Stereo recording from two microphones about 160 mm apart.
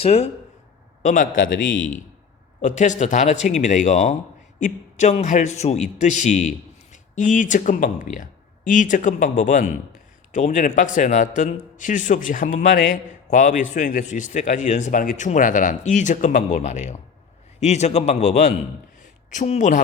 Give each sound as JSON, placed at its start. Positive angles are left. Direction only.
{"t": 0.0, "sound": "speech", "side_deg": 40}
{"t": 1.0, "sound": "speech", "side_deg": 55}
{"t": 2.6, "sound": "speech", "side_deg": 50}